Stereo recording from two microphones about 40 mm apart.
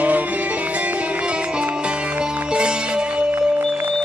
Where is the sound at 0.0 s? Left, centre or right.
Right.